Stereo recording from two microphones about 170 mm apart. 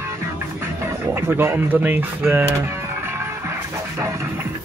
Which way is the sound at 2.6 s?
15° right (ahead or behind).